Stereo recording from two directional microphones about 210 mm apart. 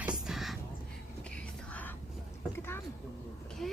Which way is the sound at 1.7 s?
10° left (ahead or behind).